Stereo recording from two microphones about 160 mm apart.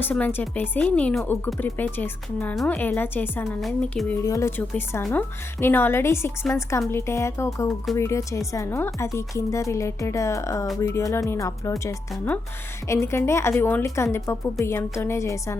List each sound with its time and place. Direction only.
0.0 s a woman's voice: 10° left (ahead or behind)
4.1 s a woman's voice: 20° left (ahead or behind)